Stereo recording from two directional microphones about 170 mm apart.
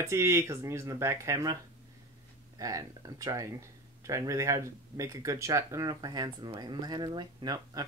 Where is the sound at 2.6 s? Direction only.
20° right (ahead or behind).